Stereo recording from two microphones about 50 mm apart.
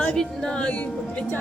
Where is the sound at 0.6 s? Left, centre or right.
Left.